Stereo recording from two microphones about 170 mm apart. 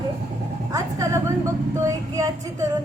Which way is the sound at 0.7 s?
20° right (ahead or behind).